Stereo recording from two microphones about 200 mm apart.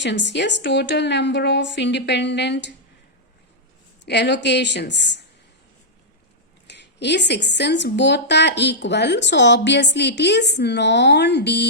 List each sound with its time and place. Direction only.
0.0 s a woman's voice: 60° left (ahead or behind)
4.0 s a woman's voice: 60° left (ahead or behind)
6.7 s a woman's voice: 60° left (ahead or behind)